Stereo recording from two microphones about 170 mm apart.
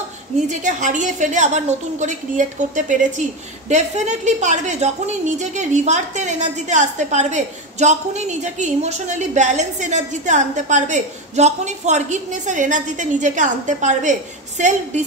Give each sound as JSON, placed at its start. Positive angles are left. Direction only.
{"t": 0.5, "sound": "a woman's voice", "side_deg": -45}